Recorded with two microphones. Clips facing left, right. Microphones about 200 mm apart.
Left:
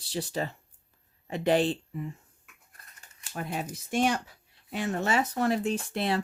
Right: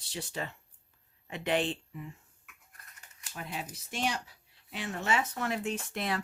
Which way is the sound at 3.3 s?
50° left (ahead or behind).